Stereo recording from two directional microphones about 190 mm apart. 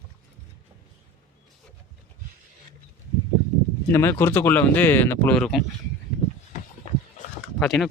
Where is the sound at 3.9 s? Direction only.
15° left (ahead or behind).